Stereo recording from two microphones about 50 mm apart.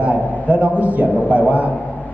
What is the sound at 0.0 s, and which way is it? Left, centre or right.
A man's voice, right.